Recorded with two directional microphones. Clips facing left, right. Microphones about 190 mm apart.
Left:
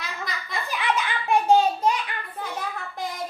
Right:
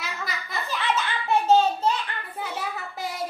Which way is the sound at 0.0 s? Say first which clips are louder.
Even; 5° right (ahead or behind).